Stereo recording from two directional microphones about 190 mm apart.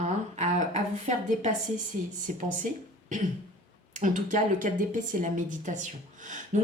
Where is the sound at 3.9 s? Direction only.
40° right (ahead or behind).